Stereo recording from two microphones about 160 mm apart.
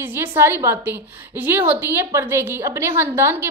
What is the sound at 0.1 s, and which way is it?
A woman's voice, 15° right (ahead or behind).